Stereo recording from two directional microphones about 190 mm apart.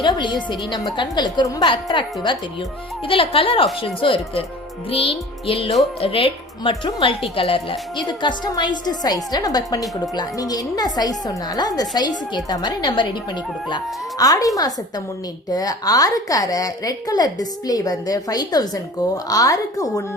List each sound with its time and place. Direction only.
0.0 s a woman's voice: 25° left (ahead or behind)